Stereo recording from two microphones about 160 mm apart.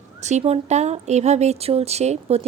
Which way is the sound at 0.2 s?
45° right (ahead or behind).